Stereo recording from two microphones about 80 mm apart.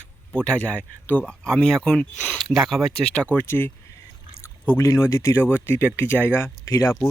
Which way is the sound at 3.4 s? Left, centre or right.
Left.